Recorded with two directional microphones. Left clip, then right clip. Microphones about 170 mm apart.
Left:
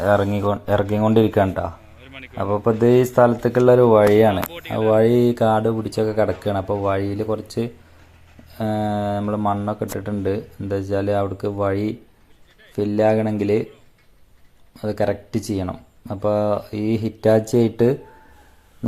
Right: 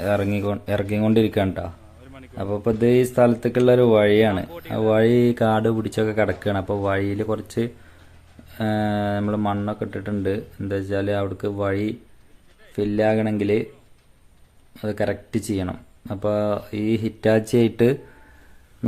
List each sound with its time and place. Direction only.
0.0 s speech: 20° right (ahead or behind)
0.3 s speech: 10° right (ahead or behind)
1.5 s a sound: 10° right (ahead or behind)
3.2 s speech: 25° right (ahead or behind)
3.8 s speech: 10° right (ahead or behind)
5.1 s speech: 35° right (ahead or behind)
5.8 s speech: 15° right (ahead or behind)
6.4 s speech: 30° right (ahead or behind)
6.7 s speech: 10° right (ahead or behind)
8.5 s speech: 5° right (ahead or behind)
9.6 s speech: centre (ahead or behind)
14.8 s speech: centre (ahead or behind)